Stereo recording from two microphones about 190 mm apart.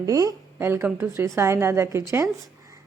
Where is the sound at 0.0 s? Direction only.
20° right (ahead or behind).